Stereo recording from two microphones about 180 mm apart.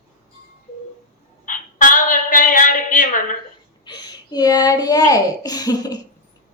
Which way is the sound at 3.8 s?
25° left (ahead or behind).